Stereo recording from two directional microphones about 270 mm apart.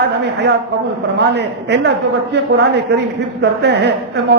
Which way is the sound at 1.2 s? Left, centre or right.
Right.